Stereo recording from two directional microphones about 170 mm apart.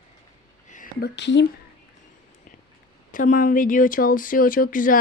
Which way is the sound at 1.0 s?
90° left.